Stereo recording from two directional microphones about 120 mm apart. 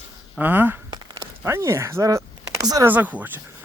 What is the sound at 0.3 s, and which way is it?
Speech, 15° right (ahead or behind).